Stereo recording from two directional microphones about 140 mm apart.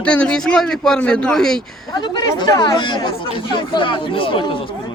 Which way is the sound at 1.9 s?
30° left (ahead or behind).